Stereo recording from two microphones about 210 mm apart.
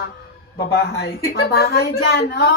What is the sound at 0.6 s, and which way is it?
A woman's voice, 50° left (ahead or behind).